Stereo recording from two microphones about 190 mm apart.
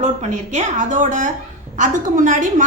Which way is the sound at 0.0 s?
40° right (ahead or behind).